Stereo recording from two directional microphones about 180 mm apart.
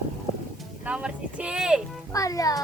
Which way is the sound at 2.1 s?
20° left (ahead or behind).